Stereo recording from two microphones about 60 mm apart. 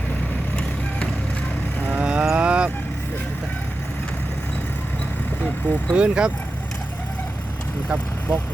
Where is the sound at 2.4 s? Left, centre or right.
Centre.